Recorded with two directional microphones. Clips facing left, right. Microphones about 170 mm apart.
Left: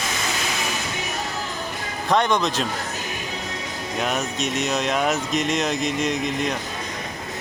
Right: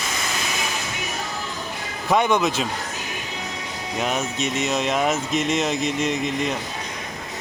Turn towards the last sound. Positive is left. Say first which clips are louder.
# even
turn(degrees=55)  # may be behind; listen again after turning